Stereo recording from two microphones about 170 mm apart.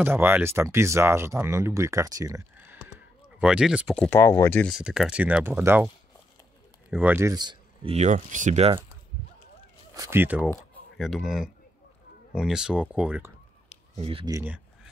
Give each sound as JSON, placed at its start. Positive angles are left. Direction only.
{"t": 0.0, "sound": "speech", "side_deg": -10}
{"t": 4.0, "sound": "speech", "side_deg": 15}
{"t": 4.6, "sound": "speech", "side_deg": -5}
{"t": 6.9, "sound": "speech", "side_deg": -10}
{"t": 7.9, "sound": "speech", "side_deg": -45}
{"t": 9.9, "sound": "speech", "side_deg": -15}
{"t": 13.9, "sound": "speech", "side_deg": -35}
{"t": 14.3, "sound": "speech", "side_deg": -10}